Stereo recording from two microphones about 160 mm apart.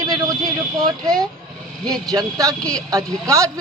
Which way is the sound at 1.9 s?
20° right (ahead or behind).